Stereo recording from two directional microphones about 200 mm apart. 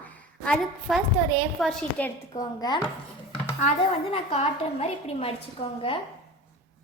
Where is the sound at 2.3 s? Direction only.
20° left (ahead or behind).